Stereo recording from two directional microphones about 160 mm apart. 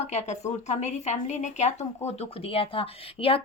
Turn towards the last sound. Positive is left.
turn(degrees=35)  # may be behind; listen again after turning